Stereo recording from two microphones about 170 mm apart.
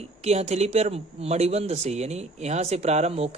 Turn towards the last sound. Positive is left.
turn(degrees=-40)  # may be behind; listen again after turning